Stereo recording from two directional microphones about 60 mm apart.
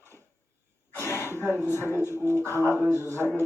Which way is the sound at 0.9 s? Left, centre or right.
Left.